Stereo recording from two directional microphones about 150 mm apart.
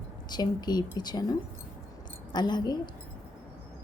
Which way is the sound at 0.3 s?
30° left (ahead or behind).